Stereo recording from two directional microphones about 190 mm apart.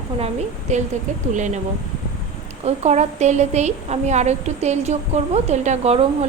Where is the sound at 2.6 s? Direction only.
35° right (ahead or behind).